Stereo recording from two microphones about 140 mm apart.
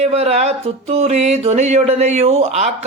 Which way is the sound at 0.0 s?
50° right (ahead or behind).